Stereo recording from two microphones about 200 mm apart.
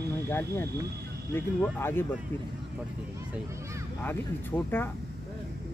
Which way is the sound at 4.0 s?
10° left (ahead or behind).